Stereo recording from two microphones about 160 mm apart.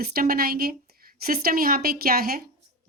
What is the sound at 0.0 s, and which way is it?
A woman's voice, 70° right (ahead or behind).